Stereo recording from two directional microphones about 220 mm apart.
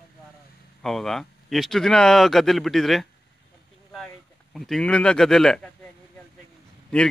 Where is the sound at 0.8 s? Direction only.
Centre (ahead or behind).